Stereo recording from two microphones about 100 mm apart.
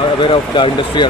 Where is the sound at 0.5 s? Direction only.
50° left (ahead or behind).